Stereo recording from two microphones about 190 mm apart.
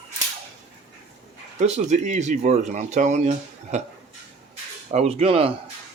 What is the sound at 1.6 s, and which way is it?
Speech, 35° right (ahead or behind).